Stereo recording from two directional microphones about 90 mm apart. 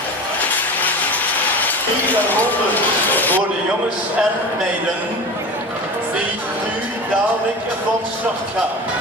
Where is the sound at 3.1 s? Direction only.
20° left (ahead or behind).